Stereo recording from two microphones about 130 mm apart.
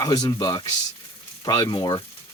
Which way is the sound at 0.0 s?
30° left (ahead or behind).